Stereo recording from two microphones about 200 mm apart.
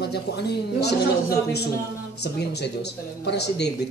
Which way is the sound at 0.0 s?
55° left (ahead or behind).